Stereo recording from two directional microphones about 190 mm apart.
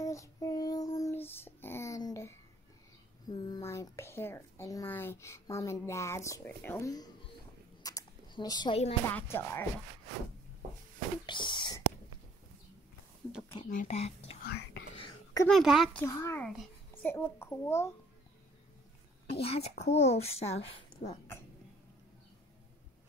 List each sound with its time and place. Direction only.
0.0 s child singing: 15° left (ahead or behind)
2.0 s a sound: 15° left (ahead or behind)
9.0 s speech: 15° left (ahead or behind)
11.2 s whispering: 25° left (ahead or behind)
13.7 s a sound: 40° left (ahead or behind)
15.4 s speech: centre (ahead or behind)
16.0 s a child's voice: 15° left (ahead or behind)
19.3 s a child's voice: 30° left (ahead or behind)
21.0 s speech: 55° left (ahead or behind)